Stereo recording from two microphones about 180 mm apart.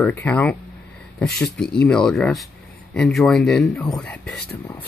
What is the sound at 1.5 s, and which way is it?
Speech, 5° left (ahead or behind).